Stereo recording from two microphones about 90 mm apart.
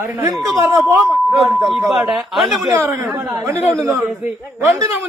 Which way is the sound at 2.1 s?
5° right (ahead or behind).